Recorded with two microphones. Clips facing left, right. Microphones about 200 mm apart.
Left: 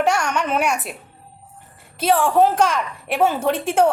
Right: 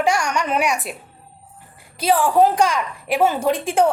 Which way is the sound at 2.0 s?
5° right (ahead or behind).